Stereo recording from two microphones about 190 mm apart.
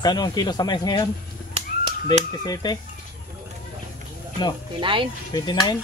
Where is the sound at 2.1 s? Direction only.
20° left (ahead or behind).